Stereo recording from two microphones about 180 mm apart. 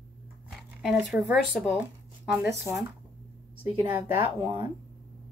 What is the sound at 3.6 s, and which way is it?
Speech, 10° right (ahead or behind).